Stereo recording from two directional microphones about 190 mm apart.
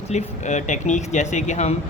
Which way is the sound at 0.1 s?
35° left (ahead or behind).